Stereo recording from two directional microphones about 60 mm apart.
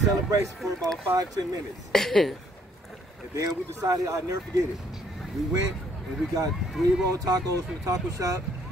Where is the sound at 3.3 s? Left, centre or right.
Right.